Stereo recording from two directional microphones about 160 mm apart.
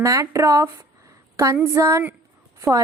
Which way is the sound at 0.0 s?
20° right (ahead or behind).